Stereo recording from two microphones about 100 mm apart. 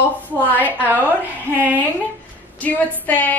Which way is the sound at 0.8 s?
15° right (ahead or behind).